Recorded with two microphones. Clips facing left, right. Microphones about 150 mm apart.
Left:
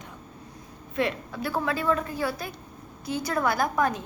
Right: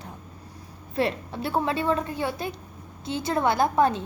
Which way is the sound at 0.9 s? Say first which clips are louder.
Right 2 dB; 30° right (ahead or behind).